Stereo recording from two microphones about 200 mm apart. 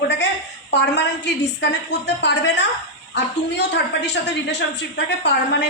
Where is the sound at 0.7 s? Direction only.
60° left (ahead or behind).